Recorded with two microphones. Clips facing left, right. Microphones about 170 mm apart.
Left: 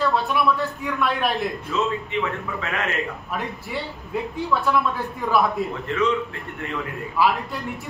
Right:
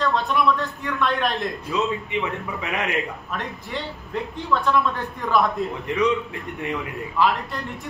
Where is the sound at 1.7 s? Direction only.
15° right (ahead or behind).